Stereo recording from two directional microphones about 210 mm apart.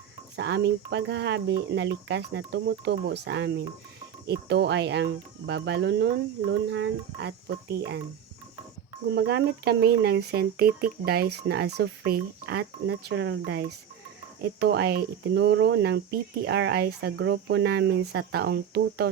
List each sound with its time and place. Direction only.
0.3 s speech: 55° right (ahead or behind)
9.1 s speech: 50° right (ahead or behind)